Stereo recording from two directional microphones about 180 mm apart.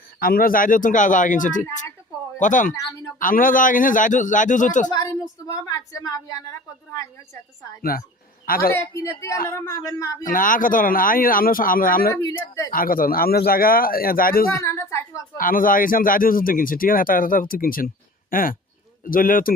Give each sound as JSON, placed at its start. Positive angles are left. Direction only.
{"t": 0.2, "sound": "speech", "side_deg": 55}
{"t": 5.5, "sound": "a woman's voice", "side_deg": 20}
{"t": 7.8, "sound": "speech", "side_deg": 55}
{"t": 8.7, "sound": "speech", "side_deg": 15}
{"t": 10.3, "sound": "speech", "side_deg": 50}
{"t": 12.2, "sound": "speech", "side_deg": 20}
{"t": 12.7, "sound": "speech", "side_deg": 50}
{"t": 14.6, "sound": "speech", "side_deg": 15}
{"t": 15.4, "sound": "speech", "side_deg": 50}